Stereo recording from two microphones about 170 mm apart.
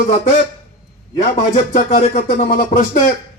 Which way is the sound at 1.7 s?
55° left (ahead or behind).